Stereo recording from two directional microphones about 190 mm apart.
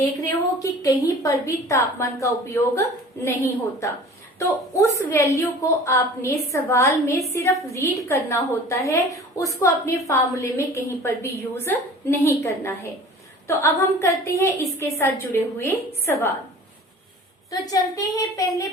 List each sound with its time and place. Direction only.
0.3 s a woman's voice: 15° left (ahead or behind)
17.5 s a woman's voice: 20° left (ahead or behind)